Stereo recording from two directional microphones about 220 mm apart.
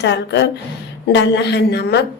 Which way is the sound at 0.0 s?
50° left (ahead or behind).